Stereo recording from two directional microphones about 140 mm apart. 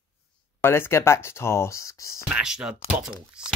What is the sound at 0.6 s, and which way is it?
Speech, 15° left (ahead or behind).